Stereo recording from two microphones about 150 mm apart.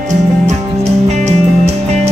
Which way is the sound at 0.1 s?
50° right (ahead or behind).